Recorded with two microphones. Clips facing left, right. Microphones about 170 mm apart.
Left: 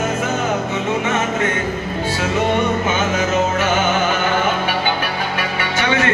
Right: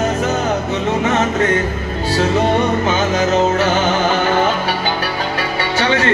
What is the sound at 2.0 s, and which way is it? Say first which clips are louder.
Music: right 4 dB; 35° right (ahead or behind).